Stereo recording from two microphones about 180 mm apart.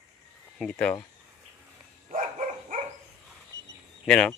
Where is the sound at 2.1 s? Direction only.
45° right (ahead or behind).